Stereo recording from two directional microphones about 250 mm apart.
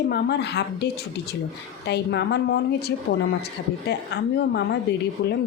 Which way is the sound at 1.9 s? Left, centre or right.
Left.